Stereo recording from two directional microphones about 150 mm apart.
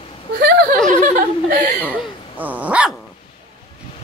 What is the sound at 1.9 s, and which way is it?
Dog, 10° right (ahead or behind).